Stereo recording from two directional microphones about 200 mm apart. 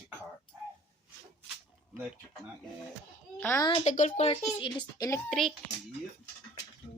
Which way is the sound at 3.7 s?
35° left (ahead or behind).